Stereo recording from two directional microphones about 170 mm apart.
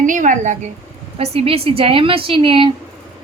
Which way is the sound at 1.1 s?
35° right (ahead or behind).